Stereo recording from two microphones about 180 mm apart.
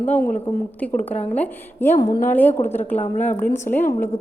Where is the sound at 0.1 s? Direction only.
10° left (ahead or behind).